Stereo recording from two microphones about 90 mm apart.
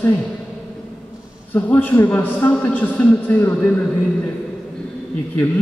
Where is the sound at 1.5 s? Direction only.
20° left (ahead or behind).